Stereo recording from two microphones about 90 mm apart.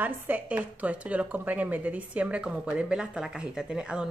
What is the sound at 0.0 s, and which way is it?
A woman's voice, 20° right (ahead or behind).